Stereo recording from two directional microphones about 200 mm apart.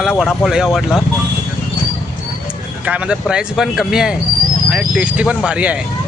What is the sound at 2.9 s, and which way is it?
Speech, 5° right (ahead or behind).